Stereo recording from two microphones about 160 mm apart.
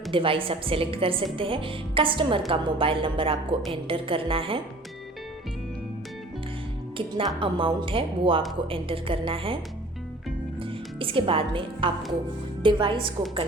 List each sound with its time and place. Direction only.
0.1 s a woman's voice: 35° right (ahead or behind)
7.3 s a woman's voice: 35° right (ahead or behind)
10.6 s music: 35° right (ahead or behind)
12.6 s a woman's voice: 30° right (ahead or behind)